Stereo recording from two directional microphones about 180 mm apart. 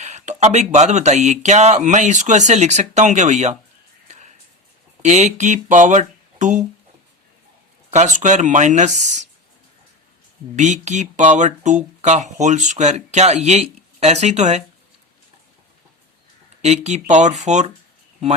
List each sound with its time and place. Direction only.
0.0 s speech: 40° right (ahead or behind)
4.1 s a sound: 40° right (ahead or behind)
5.0 s speech: 40° right (ahead or behind)
7.9 s speech: 40° right (ahead or behind)
10.5 s speech: 40° right (ahead or behind)
16.6 s speech: 40° right (ahead or behind)